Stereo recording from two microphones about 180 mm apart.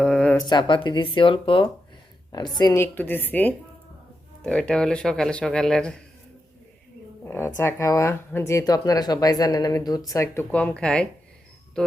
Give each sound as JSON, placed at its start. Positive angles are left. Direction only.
{"t": 0.0, "sound": "a sound", "side_deg": 5}
{"t": 0.4, "sound": "speech", "side_deg": 25}
{"t": 2.6, "sound": "speech", "side_deg": 20}
{"t": 7.3, "sound": "speech", "side_deg": 10}
{"t": 11.8, "sound": "music", "side_deg": 5}